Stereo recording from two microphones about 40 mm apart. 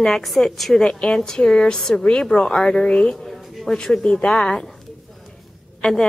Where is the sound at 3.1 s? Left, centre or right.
Centre.